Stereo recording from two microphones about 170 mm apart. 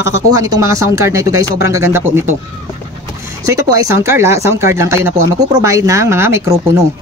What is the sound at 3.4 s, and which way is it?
Speech, 20° right (ahead or behind).